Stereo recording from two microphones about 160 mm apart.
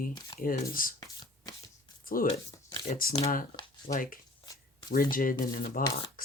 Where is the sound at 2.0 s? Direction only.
65° left (ahead or behind).